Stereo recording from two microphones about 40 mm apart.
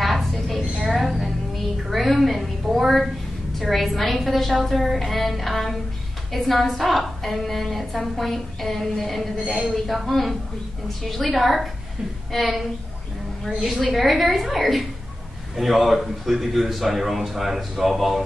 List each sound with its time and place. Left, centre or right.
0.0 s a sound: centre
3.5 s a woman's voice: centre
13.9 s a woman's voice: centre